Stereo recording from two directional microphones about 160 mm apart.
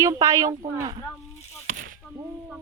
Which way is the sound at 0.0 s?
20° right (ahead or behind).